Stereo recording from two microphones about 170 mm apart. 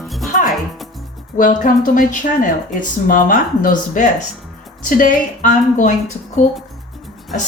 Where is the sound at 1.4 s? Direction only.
50° left (ahead or behind).